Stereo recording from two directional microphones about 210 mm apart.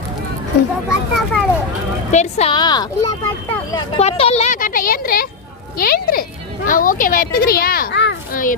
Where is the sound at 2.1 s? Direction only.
35° left (ahead or behind); by 8.4 s 55° left (ahead or behind).